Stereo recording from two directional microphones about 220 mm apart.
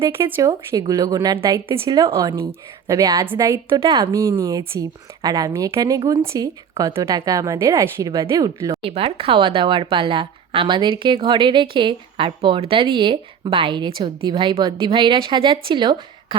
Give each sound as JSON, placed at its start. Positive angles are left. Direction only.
{"t": 0.0, "sound": "a woman's voice", "side_deg": -10}
{"t": 8.9, "sound": "speech", "side_deg": -25}